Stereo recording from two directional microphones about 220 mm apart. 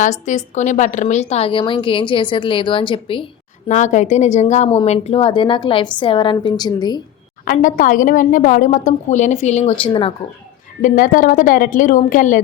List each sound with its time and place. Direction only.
0.0 s speech: 35° left (ahead or behind)
3.7 s speech: 35° left (ahead or behind)
7.4 s a woman's voice: 35° left (ahead or behind)
10.8 s a woman's voice: 40° left (ahead or behind)